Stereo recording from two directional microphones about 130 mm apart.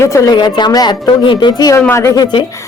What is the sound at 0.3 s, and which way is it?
Speech, 35° left (ahead or behind).